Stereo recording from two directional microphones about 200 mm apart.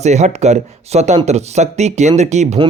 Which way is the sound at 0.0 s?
35° right (ahead or behind).